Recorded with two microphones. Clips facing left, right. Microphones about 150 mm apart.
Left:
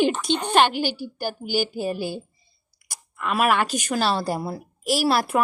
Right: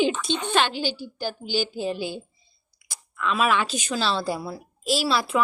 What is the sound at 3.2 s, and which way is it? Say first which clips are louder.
Speech: left 2 dB; 60° left (ahead or behind).